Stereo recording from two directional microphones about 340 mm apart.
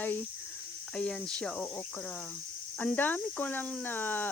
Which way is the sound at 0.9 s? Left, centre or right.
Centre.